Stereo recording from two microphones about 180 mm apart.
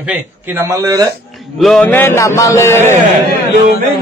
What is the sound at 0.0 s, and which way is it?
Speech, 10° right (ahead or behind).